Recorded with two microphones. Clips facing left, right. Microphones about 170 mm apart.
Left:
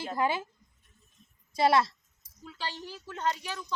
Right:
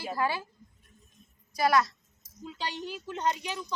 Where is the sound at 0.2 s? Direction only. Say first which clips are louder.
Left 2 dB; 20° left (ahead or behind).